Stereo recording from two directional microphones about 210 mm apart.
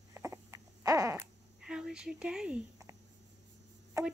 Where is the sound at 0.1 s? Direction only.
15° right (ahead or behind).